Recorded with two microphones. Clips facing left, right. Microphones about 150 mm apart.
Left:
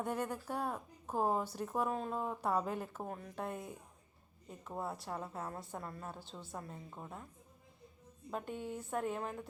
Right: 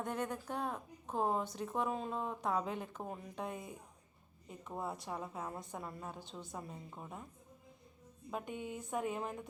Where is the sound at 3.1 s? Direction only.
5° right (ahead or behind).